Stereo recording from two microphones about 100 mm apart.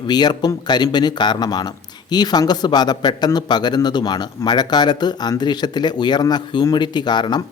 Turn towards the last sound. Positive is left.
turn(degrees=45)  # may be behind; listen again after turning